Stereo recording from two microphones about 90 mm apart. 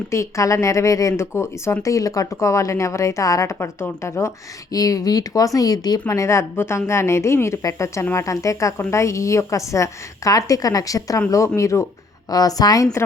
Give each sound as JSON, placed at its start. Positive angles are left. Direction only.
{"t": 0.1, "sound": "speech", "side_deg": 35}
{"t": 4.7, "sound": "speech", "side_deg": 40}
{"t": 6.1, "sound": "speech", "side_deg": 35}